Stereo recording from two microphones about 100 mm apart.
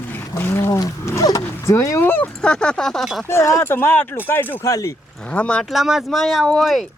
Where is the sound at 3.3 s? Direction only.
30° left (ahead or behind).